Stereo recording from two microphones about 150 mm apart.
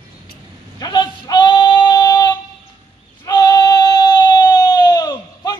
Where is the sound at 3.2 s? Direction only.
25° left (ahead or behind).